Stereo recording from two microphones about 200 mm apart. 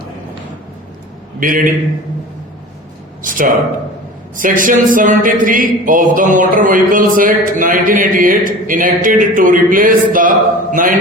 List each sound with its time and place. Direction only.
1.4 s speech: 45° right (ahead or behind)
3.2 s speech: 40° right (ahead or behind)